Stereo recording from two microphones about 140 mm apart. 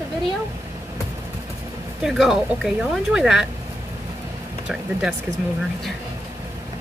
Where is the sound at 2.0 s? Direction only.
5° right (ahead or behind).